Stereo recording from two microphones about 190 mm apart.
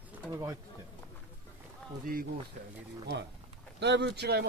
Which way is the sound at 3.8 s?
65° right (ahead or behind).